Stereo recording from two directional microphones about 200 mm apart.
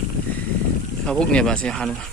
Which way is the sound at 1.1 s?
5° left (ahead or behind).